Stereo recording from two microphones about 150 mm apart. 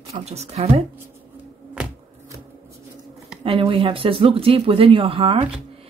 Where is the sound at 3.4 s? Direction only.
40° right (ahead or behind).